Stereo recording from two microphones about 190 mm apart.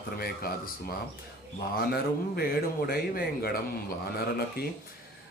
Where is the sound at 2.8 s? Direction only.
55° left (ahead or behind).